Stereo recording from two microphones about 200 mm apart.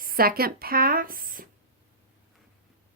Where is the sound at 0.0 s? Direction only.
45° right (ahead or behind).